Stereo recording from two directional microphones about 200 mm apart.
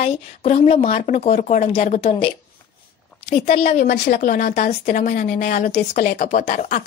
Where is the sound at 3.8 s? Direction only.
50° left (ahead or behind).